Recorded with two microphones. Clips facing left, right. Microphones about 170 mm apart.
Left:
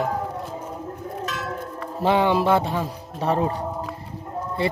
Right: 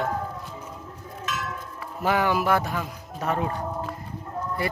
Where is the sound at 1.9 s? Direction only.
25° left (ahead or behind).